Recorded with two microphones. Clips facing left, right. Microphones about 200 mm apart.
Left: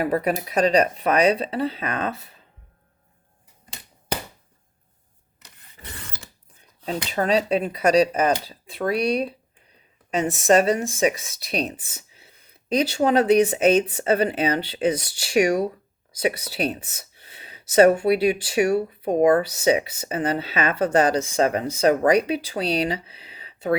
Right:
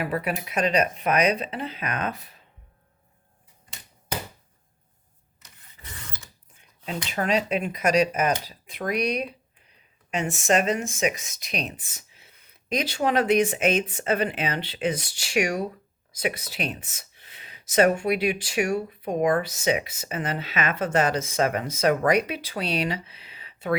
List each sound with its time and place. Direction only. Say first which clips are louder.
0.0 s speech: left 5 dB; 40° left (ahead or behind)
5.8 s a sound: left 5 dB; 60° left (ahead or behind)
6.6 s speech: left 4 dB; 35° left (ahead or behind)